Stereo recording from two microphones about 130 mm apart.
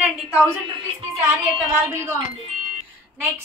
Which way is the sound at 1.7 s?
15° right (ahead or behind).